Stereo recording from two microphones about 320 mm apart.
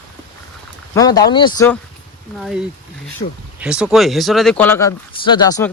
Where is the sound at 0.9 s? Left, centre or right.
Centre.